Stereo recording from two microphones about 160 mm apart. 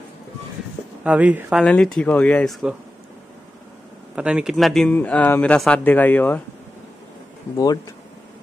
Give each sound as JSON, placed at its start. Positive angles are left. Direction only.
{"t": 1.0, "sound": "speech", "side_deg": -10}
{"t": 1.6, "sound": "speech", "side_deg": 5}
{"t": 4.1, "sound": "speech", "side_deg": -5}
{"t": 7.5, "sound": "speech", "side_deg": 25}